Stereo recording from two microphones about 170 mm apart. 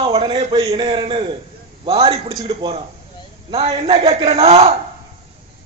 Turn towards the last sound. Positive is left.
turn(degrees=-35)  # may be behind; listen again after turning